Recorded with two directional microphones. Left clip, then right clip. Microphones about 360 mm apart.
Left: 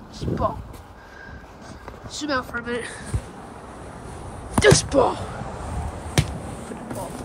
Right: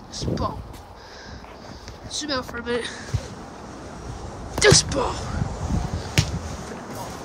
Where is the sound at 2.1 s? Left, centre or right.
Centre.